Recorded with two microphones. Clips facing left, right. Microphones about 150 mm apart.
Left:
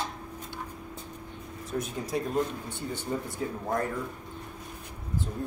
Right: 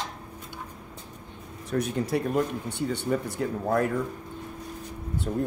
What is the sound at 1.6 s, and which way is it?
Speech, 70° right (ahead or behind).